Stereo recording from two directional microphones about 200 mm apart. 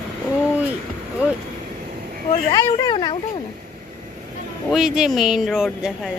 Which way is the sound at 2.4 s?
20° left (ahead or behind).